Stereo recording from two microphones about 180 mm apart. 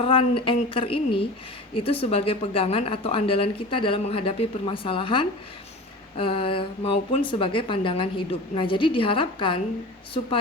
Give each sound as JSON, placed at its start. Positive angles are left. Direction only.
{"t": 0.0, "sound": "a woman's voice", "side_deg": 30}